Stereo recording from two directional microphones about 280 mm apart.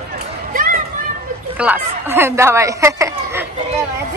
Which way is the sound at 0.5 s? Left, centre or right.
Right.